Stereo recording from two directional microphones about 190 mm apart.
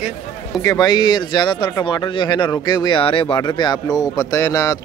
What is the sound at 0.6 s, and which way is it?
Speech, 20° left (ahead or behind).